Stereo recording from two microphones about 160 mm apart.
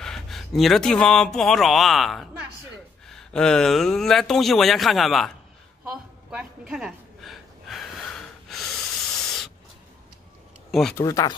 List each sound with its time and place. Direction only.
0.0 s a man's voice: centre (ahead or behind)
6.3 s gasp: 5° right (ahead or behind)
10.7 s speech: centre (ahead or behind)
11.0 s speech: 20° left (ahead or behind)